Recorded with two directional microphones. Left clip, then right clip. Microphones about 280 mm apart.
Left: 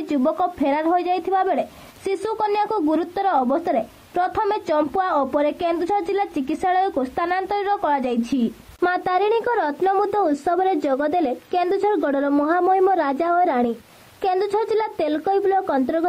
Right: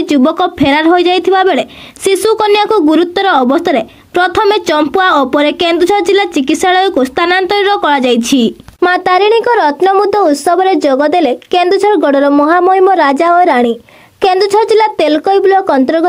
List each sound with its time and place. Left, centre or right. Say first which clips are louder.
0.0 s speech: right 10 dB; right